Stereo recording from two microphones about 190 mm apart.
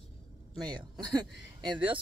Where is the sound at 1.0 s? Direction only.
20° right (ahead or behind).